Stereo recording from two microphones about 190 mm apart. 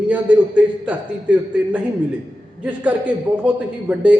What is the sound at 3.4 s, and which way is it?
Speech, 5° right (ahead or behind).